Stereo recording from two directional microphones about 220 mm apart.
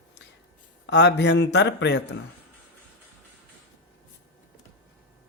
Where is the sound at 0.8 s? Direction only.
50° left (ahead or behind).